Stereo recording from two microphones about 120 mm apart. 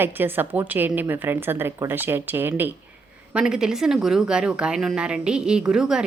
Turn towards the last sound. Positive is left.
turn(degrees=-5)  # may be behind; listen again after turning